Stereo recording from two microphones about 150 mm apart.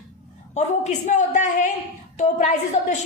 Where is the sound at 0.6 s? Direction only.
50° left (ahead or behind).